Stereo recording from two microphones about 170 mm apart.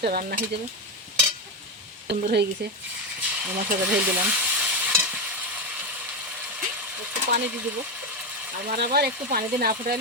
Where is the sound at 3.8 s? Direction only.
10° right (ahead or behind).